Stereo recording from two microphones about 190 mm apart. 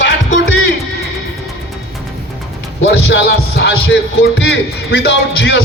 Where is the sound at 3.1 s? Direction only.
60° left (ahead or behind).